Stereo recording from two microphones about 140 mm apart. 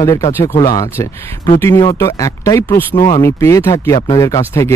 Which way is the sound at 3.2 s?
20° left (ahead or behind).